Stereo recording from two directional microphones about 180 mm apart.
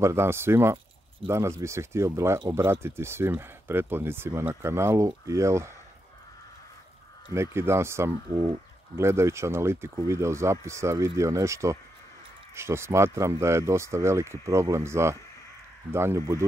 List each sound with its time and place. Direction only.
0.0 s speech: 15° right (ahead or behind)
7.3 s speech: 15° right (ahead or behind)